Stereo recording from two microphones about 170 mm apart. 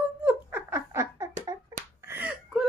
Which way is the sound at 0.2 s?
10° right (ahead or behind).